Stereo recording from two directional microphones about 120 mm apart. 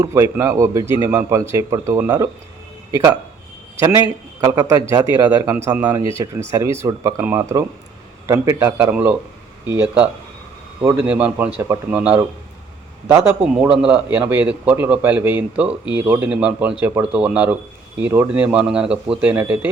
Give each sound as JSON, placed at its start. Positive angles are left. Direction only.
{"t": 0.0, "sound": "a man's voice", "side_deg": -25}
{"t": 5.7, "sound": "a man's voice", "side_deg": -15}
{"t": 6.5, "sound": "a man's voice", "side_deg": -25}
{"t": 13.5, "sound": "a man's voice", "side_deg": -10}